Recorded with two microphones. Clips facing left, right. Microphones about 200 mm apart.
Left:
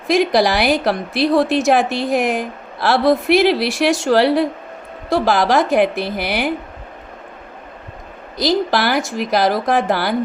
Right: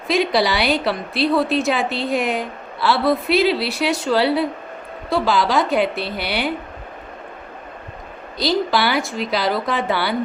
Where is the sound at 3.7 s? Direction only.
90° left.